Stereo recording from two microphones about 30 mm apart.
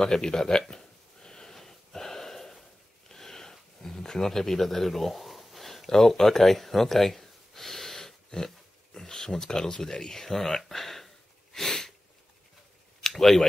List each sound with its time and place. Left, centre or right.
0.0 s a sound: left
1.6 s gasp: centre
3.1 s a sound: centre
5.9 s speech: centre
10.2 s speech: centre
11.5 s sniff: centre
13.1 s speech: centre